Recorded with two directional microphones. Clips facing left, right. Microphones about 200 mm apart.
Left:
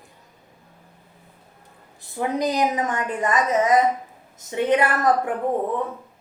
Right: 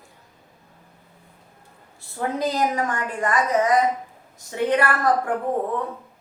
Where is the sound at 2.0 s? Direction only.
15° left (ahead or behind).